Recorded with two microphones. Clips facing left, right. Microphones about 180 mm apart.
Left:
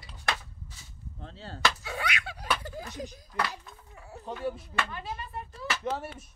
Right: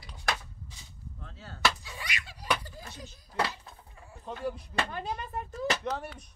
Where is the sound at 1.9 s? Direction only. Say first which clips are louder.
Left 7 dB; 65° left (ahead or behind).